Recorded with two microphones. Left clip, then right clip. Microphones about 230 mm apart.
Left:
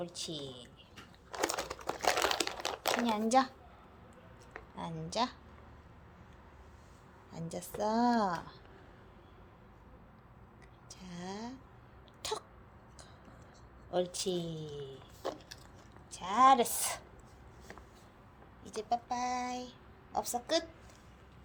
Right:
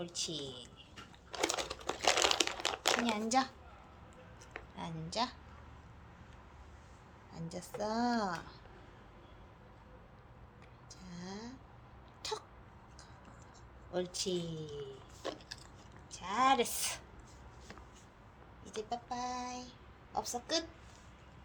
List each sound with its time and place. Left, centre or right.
0.0 s a woman's voice: centre
1.3 s crumpling: centre
3.2 s a woman's voice: left
4.5 s speech: left
7.3 s a woman's voice: left
10.8 s a sound: left
13.9 s a woman's voice: left
18.6 s child singing: left